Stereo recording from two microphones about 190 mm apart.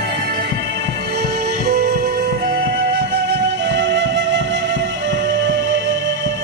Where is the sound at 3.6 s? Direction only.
70° right (ahead or behind).